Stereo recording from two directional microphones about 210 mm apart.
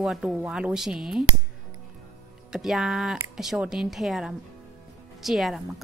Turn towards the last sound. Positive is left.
turn(degrees=0)  # may be behind; listen again after turning